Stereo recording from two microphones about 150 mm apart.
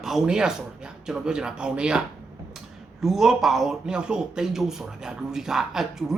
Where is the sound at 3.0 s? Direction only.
Centre (ahead or behind).